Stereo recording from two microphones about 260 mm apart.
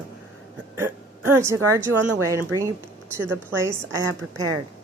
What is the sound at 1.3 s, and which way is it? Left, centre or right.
Speech, centre.